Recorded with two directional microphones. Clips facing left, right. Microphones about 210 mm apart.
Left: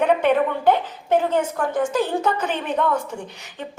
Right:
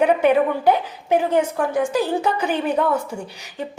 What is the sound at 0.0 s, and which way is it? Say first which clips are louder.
A woman's voice: right 2 dB; 10° right (ahead or behind).